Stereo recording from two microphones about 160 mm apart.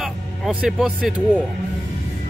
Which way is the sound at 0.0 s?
5° right (ahead or behind).